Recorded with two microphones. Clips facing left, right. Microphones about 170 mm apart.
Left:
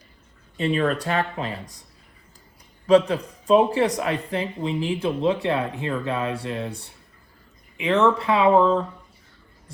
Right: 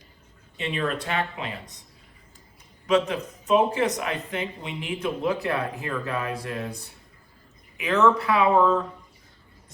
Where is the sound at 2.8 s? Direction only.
35° left (ahead or behind).